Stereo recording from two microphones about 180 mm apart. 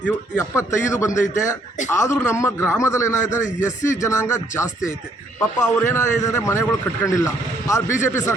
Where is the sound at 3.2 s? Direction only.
45° left (ahead or behind).